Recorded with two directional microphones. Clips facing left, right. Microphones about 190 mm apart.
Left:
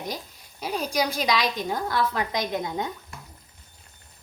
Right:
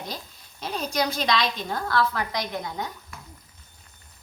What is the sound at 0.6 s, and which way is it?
A woman's voice, 10° left (ahead or behind).